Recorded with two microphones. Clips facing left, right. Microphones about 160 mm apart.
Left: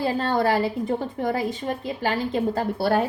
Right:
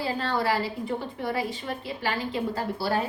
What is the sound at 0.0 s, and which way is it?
A woman's voice, 45° left (ahead or behind).